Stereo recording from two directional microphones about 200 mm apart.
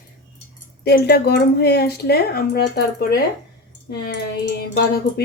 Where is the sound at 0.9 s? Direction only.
50° left (ahead or behind).